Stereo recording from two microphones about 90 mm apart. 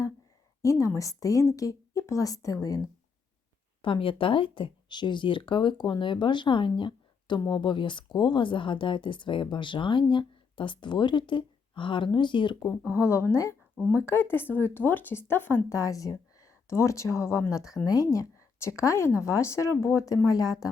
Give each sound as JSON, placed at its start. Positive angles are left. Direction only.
{"t": 0.6, "sound": "speech", "side_deg": 35}
{"t": 3.8, "sound": "speech", "side_deg": 70}
{"t": 13.0, "sound": "speech", "side_deg": 30}
{"t": 15.8, "sound": "a woman's voice", "side_deg": 40}